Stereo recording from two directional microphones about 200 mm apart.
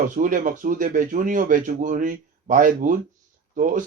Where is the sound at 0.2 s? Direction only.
40° right (ahead or behind).